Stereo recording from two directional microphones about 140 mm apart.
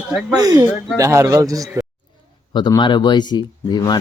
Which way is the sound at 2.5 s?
35° left (ahead or behind).